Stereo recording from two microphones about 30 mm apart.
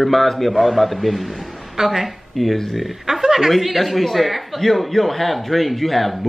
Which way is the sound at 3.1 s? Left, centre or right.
Centre.